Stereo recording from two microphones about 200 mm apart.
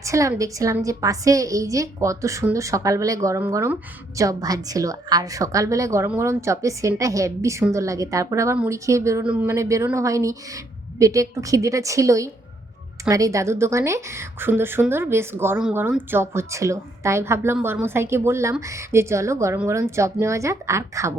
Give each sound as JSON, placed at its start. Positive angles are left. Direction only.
{"t": 0.0, "sound": "a woman's voice", "side_deg": -15}